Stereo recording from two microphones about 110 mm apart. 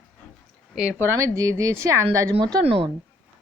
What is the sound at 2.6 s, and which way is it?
Speech, 55° right (ahead or behind).